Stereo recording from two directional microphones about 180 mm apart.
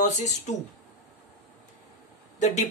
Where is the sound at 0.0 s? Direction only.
40° left (ahead or behind).